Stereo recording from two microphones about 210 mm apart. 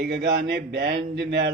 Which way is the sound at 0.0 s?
50° right (ahead or behind).